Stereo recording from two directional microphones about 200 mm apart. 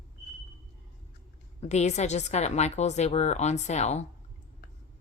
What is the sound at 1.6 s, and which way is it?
Speech, 35° left (ahead or behind).